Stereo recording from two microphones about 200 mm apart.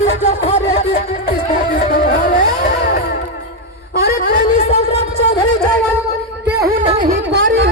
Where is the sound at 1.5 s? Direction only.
40° left (ahead or behind).